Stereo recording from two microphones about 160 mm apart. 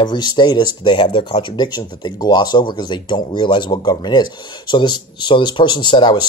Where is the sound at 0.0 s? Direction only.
30° left (ahead or behind).